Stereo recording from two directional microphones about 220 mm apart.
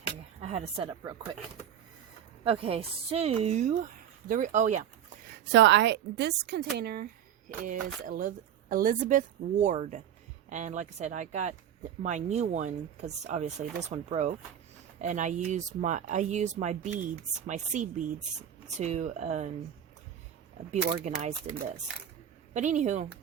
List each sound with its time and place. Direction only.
0.4 s a woman's voice: 30° right (ahead or behind)
2.4 s speech: 25° right (ahead or behind)
5.5 s speech: 55° right (ahead or behind); by 19.5 s 30° right (ahead or behind)
20.7 s speech: 30° right (ahead or behind)